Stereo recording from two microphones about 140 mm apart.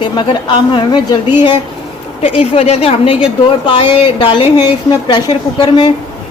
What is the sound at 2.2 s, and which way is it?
A woman's voice, 45° left (ahead or behind).